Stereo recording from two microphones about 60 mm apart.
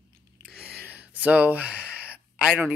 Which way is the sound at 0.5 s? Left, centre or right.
Right.